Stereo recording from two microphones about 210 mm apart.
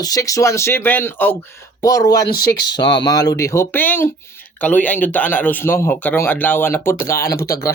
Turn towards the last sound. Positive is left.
turn(degrees=15)  # may be behind; listen again after turning